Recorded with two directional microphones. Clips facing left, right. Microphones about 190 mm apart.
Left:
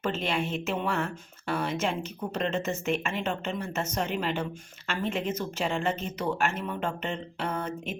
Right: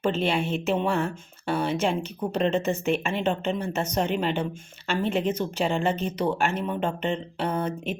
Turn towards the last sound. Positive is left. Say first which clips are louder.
# right 5 dB
turn(degrees=-35)  # may be behind; listen again after turning